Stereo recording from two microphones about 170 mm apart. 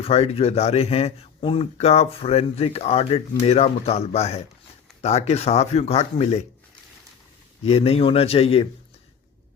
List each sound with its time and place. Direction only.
0.0 s a man's voice: 35° left (ahead or behind)
7.6 s a man's voice: 35° left (ahead or behind)